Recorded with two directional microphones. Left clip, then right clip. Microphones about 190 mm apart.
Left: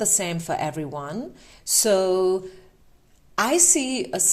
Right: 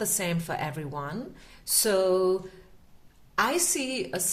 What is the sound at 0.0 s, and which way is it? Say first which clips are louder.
A woman's voice: left 5 dB; 30° left (ahead or behind).